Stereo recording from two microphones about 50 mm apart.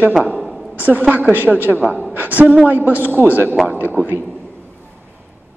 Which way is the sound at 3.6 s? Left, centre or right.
Right.